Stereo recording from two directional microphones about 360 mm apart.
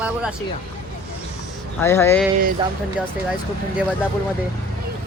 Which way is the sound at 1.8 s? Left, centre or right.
Centre.